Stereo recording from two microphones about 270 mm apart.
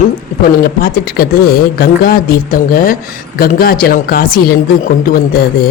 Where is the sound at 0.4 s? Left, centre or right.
Left.